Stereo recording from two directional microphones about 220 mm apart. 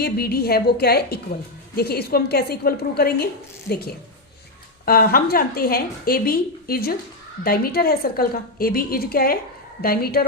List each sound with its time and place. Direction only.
0.0 s a woman's voice: 45° left (ahead or behind)